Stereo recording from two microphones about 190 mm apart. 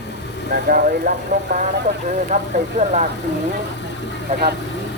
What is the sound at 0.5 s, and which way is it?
Music, 50° right (ahead or behind).